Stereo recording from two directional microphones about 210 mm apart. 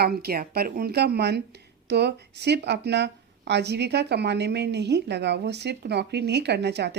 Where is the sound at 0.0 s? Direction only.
45° right (ahead or behind).